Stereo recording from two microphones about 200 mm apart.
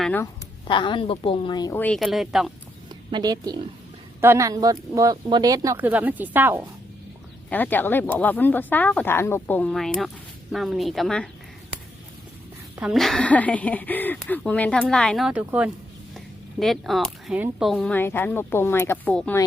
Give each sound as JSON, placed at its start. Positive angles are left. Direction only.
{"t": 0.0, "sound": "speech", "side_deg": 10}
{"t": 0.7, "sound": "a woman's voice", "side_deg": 25}
{"t": 1.8, "sound": "speech", "side_deg": 0}
{"t": 3.1, "sound": "a woman's voice", "side_deg": -20}
{"t": 7.5, "sound": "speech", "side_deg": 10}
{"t": 12.8, "sound": "speech", "side_deg": 0}